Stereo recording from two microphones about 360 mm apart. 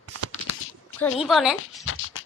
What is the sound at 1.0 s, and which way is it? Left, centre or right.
Speech, centre.